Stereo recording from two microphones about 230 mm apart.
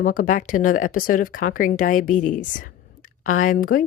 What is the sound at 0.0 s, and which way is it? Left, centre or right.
Speech, left.